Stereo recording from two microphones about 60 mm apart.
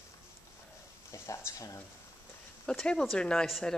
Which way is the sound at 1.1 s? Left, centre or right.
Left.